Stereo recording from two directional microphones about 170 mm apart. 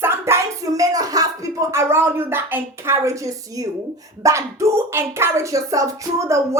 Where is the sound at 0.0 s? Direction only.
15° right (ahead or behind).